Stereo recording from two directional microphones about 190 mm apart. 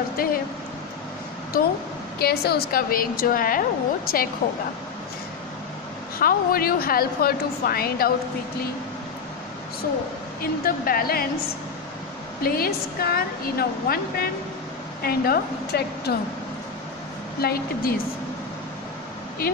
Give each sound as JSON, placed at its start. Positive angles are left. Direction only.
{"t": 0.2, "sound": "speech", "side_deg": 50}
{"t": 1.5, "sound": "a woman's voice", "side_deg": 50}
{"t": 6.1, "sound": "a woman's voice", "side_deg": 50}
{"t": 10.4, "sound": "a woman's voice", "side_deg": 50}
{"t": 12.4, "sound": "a woman's voice", "side_deg": 55}
{"t": 15.0, "sound": "a woman's voice", "side_deg": 55}
{"t": 17.4, "sound": "a woman's voice", "side_deg": 55}